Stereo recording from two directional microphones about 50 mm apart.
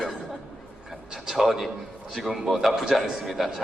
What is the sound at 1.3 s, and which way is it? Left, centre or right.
A man's voice, centre.